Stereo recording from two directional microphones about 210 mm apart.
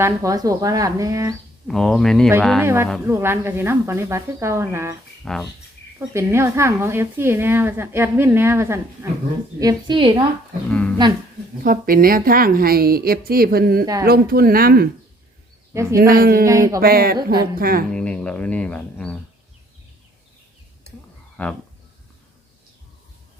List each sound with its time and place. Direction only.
0.0 s a woman's voice: 15° right (ahead or behind)
1.6 s speech: centre (ahead or behind)
3.1 s a woman's voice: 10° right (ahead or behind)
5.2 s speech: centre (ahead or behind)
6.0 s a woman's voice: 10° right (ahead or behind)
10.7 s speech: 5° left (ahead or behind)
11.6 s a woman's voice: 40° right (ahead or behind)
15.7 s a man's voice: 15° right (ahead or behind)
16.0 s a woman's voice: 45° right (ahead or behind)
16.5 s a woman's voice: 15° right (ahead or behind)
16.8 s a woman's voice: 45° right (ahead or behind)
17.9 s music: 5° left (ahead or behind)
21.4 s speech: 5° left (ahead or behind)